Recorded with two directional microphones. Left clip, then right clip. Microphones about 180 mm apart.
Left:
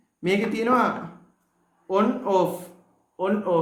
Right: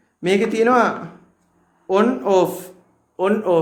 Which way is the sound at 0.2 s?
45° right (ahead or behind).